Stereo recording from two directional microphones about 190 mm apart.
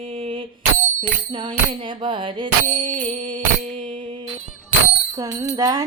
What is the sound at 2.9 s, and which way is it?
Music, 40° right (ahead or behind).